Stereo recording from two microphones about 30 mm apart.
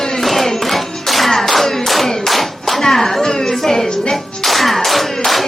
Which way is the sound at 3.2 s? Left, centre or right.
Centre.